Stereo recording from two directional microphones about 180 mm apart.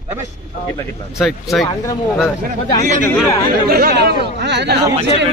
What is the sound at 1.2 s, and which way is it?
Speech, centre (ahead or behind).